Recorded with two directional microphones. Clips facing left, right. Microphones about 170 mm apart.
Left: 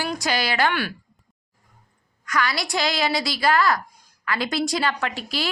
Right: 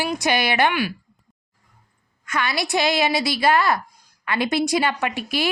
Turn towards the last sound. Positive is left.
turn(degrees=-20)  # may be behind; listen again after turning